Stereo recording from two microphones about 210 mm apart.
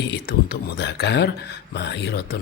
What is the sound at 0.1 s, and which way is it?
A man's voice, 50° left (ahead or behind).